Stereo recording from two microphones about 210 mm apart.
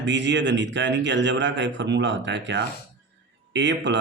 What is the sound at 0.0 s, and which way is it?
Speech, 60° right (ahead or behind).